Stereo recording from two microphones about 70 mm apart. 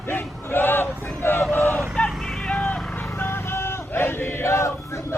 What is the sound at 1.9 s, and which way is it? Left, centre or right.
Vehicle, centre.